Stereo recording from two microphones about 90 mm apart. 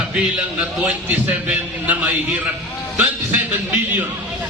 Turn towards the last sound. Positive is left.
turn(degrees=-20)  # may be behind; listen again after turning